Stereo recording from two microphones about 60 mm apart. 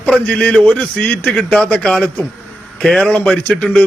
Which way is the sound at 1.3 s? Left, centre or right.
Centre.